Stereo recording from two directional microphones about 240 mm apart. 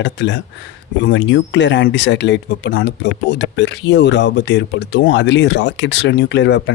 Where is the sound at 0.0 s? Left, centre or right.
Left.